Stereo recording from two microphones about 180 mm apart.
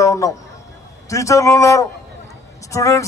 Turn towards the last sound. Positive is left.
turn(degrees=15)  # may be behind; listen again after turning